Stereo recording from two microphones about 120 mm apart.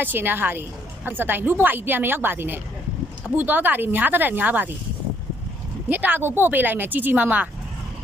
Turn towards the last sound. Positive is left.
turn(degrees=-15)  # may be behind; listen again after turning